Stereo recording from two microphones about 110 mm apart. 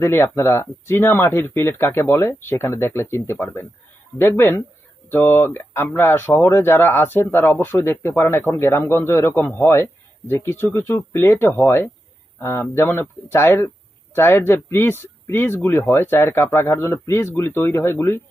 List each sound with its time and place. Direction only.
0.0 s speech: 20° left (ahead or behind)